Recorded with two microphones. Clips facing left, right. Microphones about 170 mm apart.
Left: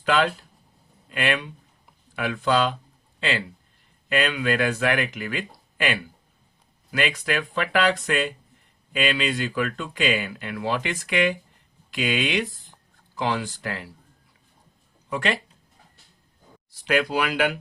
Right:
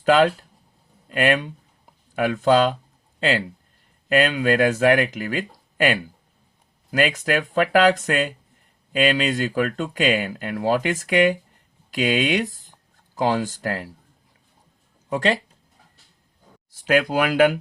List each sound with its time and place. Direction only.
0.0 s speech: 40° right (ahead or behind)
15.1 s speech: 35° right (ahead or behind)
16.7 s speech: 45° right (ahead or behind)